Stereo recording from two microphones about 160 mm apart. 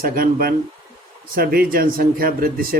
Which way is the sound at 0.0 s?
65° right (ahead or behind).